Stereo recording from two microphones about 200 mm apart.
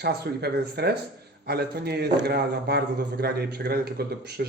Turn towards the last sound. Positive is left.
turn(degrees=-50)  # may be behind; listen again after turning